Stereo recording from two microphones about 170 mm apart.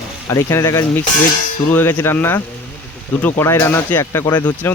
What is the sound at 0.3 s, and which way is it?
Speech, 15° left (ahead or behind).